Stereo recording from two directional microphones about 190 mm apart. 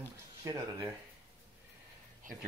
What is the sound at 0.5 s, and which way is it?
Speech, 25° right (ahead or behind).